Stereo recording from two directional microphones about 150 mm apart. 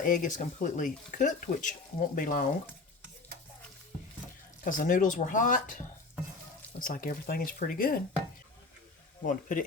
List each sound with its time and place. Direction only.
0.0 s speech: 60° left (ahead or behind)
4.6 s speech: 65° left (ahead or behind)
9.2 s speech: 60° left (ahead or behind)